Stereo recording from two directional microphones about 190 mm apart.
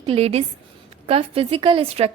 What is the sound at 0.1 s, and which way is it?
A woman's voice, 30° right (ahead or behind).